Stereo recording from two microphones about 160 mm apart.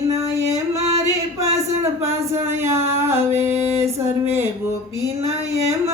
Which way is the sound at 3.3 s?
15° right (ahead or behind).